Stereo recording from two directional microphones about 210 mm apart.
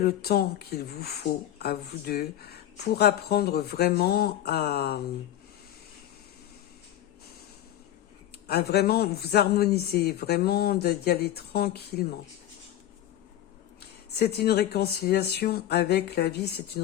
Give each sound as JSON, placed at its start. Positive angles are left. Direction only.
{"t": 0.0, "sound": "speech", "side_deg": 45}
{"t": 8.4, "sound": "speech", "side_deg": 50}
{"t": 13.7, "sound": "speech", "side_deg": 50}